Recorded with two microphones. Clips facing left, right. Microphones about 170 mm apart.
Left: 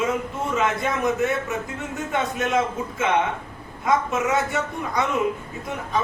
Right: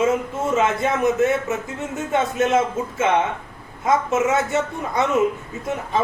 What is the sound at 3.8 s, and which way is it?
Speech, 25° right (ahead or behind).